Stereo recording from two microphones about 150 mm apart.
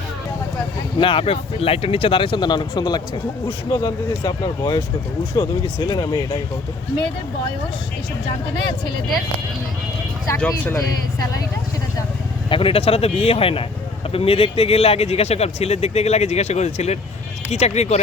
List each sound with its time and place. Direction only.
0.9 s speech: 35° left (ahead or behind)
10.3 s speech: 10° left (ahead or behind)
12.5 s speech: 35° left (ahead or behind)